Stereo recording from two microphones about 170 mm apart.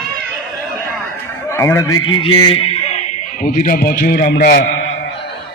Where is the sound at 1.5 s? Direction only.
15° left (ahead or behind).